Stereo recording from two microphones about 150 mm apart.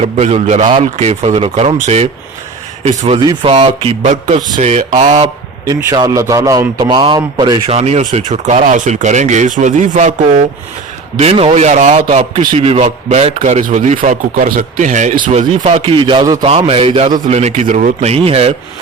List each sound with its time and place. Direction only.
0.0 s a man's voice: 45° right (ahead or behind)
5.1 s a man's voice: 25° right (ahead or behind)
7.7 s a man's voice: 45° right (ahead or behind)
11.2 s a man's voice: 40° right (ahead or behind)
12.0 s speech: 35° right (ahead or behind); by 15.4 s 60° right (ahead or behind)
15.4 s speech: 40° right (ahead or behind)
16.4 s a man's voice: 40° right (ahead or behind)